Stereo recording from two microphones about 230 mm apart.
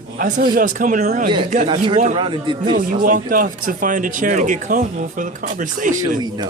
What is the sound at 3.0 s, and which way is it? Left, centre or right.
Speech, right.